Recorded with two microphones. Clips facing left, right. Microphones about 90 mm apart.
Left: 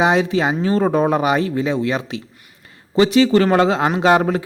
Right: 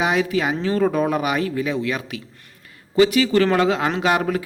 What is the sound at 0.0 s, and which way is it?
Speech, 30° left (ahead or behind).